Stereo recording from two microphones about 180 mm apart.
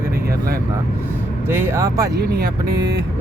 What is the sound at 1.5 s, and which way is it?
Speech, 15° right (ahead or behind).